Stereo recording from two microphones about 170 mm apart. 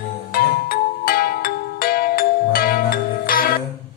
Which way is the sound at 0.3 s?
60° left (ahead or behind).